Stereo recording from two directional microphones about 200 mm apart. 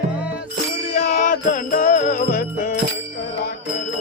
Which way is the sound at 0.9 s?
40° left (ahead or behind).